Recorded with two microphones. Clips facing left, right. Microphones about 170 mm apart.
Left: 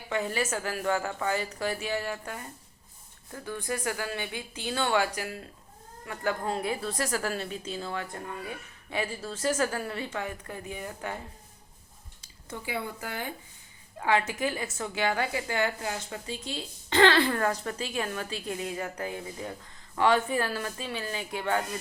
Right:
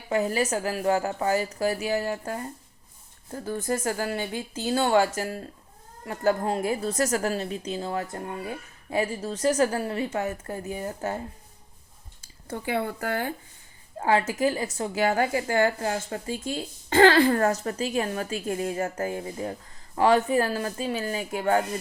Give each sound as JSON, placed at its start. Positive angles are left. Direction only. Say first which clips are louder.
{"t": 0.1, "sound": "a woman's voice", "louder": "right 5 dB", "side_deg": -35}
{"t": 12.5, "sound": "speech", "louder": "right 6 dB", "side_deg": -55}
{"t": 14.0, "sound": "a woman's voice", "louder": "right 4 dB", "side_deg": -40}